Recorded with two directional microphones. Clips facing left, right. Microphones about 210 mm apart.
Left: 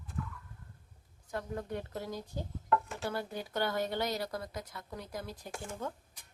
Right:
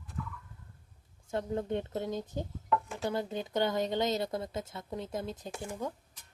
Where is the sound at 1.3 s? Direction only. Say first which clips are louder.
Right 5 dB; 25° right (ahead or behind).